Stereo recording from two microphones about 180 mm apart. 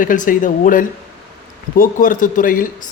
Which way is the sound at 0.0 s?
50° left (ahead or behind).